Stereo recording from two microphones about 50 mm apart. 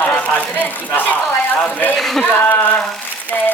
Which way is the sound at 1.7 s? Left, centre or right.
Left.